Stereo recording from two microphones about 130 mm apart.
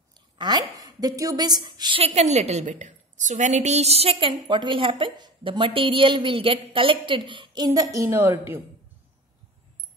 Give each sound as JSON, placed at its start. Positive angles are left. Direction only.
{"t": 0.4, "sound": "a woman's voice", "side_deg": -35}
{"t": 2.0, "sound": "a woman's voice", "side_deg": -60}